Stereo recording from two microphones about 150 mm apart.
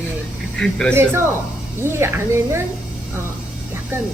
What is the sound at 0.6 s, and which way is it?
Speech, 5° left (ahead or behind).